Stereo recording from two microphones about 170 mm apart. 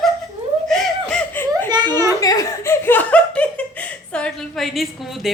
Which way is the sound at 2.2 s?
20° left (ahead or behind).